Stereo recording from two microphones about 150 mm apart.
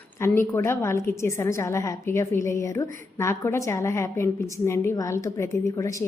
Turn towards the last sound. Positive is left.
turn(degrees=20)  # may be behind; listen again after turning